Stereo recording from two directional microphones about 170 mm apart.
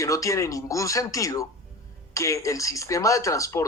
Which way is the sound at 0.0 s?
20° left (ahead or behind).